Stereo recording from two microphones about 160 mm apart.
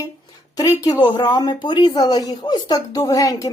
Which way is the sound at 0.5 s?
20° left (ahead or behind).